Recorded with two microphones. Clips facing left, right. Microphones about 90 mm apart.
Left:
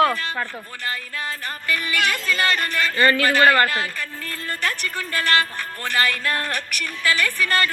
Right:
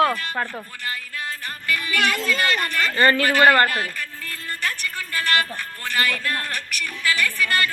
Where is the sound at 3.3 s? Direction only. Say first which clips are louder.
Right 1 dB; 15° right (ahead or behind).